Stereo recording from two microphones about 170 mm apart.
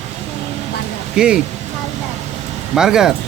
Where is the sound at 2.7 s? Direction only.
5° right (ahead or behind).